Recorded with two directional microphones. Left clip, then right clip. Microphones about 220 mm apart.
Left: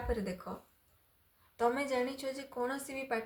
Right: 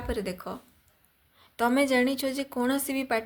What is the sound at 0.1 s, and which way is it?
Speech, 40° right (ahead or behind).